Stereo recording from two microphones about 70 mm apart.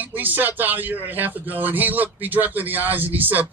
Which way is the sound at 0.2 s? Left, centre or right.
Right.